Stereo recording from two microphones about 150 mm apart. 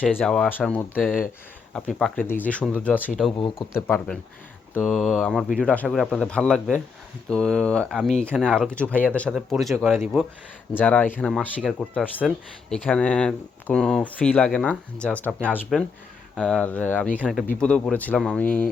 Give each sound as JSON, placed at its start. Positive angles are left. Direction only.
{"t": 0.0, "sound": "speech", "side_deg": 5}
{"t": 2.2, "sound": "speech", "side_deg": 15}
{"t": 3.1, "sound": "speech", "side_deg": 0}
{"t": 10.8, "sound": "speech", "side_deg": 10}
{"t": 17.2, "sound": "speech", "side_deg": 0}